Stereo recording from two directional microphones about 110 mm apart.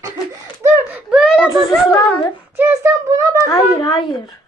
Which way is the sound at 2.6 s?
25° right (ahead or behind).